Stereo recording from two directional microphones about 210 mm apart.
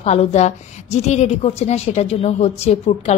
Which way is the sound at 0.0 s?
30° left (ahead or behind).